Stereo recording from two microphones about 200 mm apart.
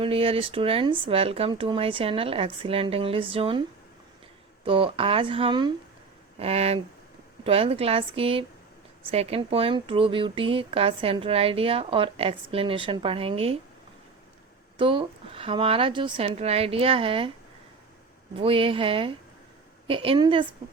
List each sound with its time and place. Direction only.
0.0 s speech: 30° right (ahead or behind)
4.6 s speech: 25° right (ahead or behind)
14.8 s speech: 25° right (ahead or behind)
18.3 s speech: 25° right (ahead or behind)